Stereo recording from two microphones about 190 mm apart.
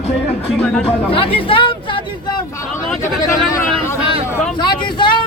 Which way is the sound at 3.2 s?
15° left (ahead or behind).